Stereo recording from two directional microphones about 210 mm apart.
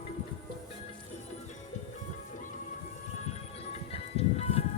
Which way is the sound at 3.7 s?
30° left (ahead or behind).